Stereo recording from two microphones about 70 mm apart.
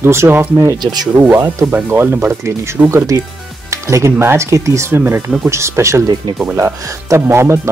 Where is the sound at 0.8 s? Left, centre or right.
Right.